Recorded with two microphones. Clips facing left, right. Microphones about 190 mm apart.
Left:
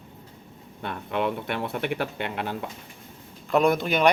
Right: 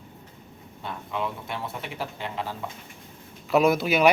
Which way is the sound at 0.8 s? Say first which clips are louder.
Left 4 dB; 65° left (ahead or behind).